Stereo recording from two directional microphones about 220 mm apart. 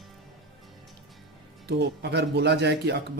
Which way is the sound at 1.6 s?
50° right (ahead or behind).